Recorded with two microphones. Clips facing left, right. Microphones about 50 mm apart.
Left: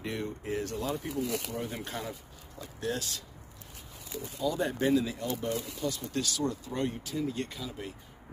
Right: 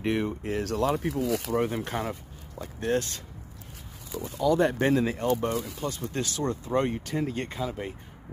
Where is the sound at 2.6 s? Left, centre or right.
Right.